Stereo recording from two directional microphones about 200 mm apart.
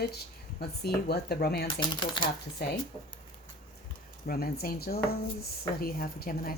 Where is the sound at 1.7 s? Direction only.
25° left (ahead or behind).